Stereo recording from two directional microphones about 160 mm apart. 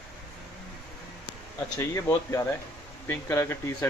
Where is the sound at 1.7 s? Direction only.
20° left (ahead or behind).